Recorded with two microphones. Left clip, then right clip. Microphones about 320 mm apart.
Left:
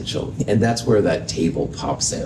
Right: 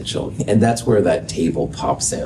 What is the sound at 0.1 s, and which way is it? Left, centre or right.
Speech, right.